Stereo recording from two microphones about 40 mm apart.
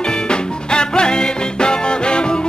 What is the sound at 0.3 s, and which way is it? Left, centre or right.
Music, left.